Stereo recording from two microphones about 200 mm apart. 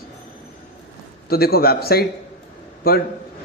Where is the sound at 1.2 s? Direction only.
50° left (ahead or behind).